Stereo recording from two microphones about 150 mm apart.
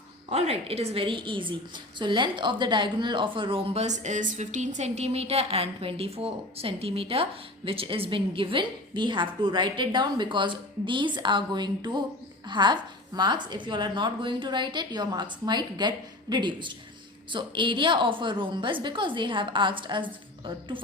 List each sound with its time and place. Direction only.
0.3 s a woman's voice: 45° right (ahead or behind)